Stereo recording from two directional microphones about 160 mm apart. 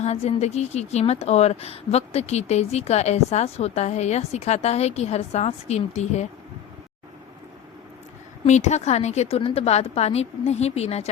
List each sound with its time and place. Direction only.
0.0 s a woman's voice: 40° left (ahead or behind)
8.4 s a woman's voice: 45° left (ahead or behind)